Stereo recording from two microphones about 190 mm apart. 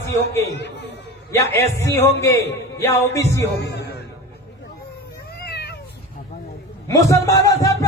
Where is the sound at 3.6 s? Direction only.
60° left (ahead or behind).